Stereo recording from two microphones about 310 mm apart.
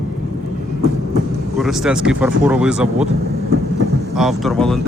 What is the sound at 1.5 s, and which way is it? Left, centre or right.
Speech, centre.